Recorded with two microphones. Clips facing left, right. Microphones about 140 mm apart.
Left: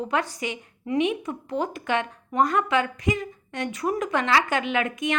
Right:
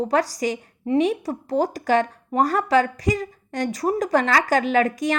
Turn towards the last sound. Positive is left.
turn(degrees=-40)  # may be behind; listen again after turning